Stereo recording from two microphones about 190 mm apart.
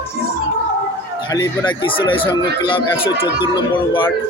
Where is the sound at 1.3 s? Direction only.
20° left (ahead or behind).